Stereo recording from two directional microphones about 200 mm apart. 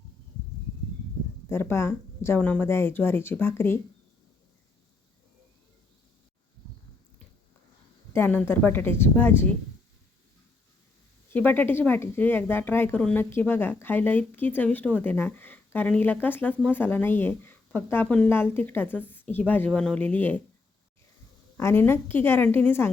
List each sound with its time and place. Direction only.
1.5 s speech: 10° left (ahead or behind)
8.1 s speech: 10° left (ahead or behind)
11.3 s speech: 10° left (ahead or behind)
21.6 s speech: 10° left (ahead or behind)